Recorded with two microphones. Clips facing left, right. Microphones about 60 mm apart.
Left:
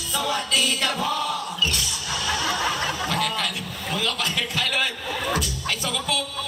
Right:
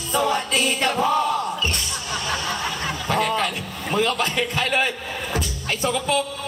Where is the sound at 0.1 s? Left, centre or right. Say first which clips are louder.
Right 4 dB; right.